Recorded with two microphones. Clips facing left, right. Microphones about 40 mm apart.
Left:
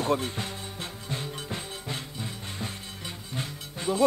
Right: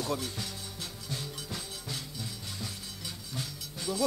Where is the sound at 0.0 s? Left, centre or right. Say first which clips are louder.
Left 7 dB; left.